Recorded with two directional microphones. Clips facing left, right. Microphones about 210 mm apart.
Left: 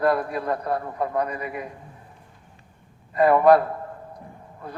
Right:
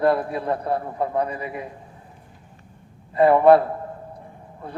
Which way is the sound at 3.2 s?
25° right (ahead or behind).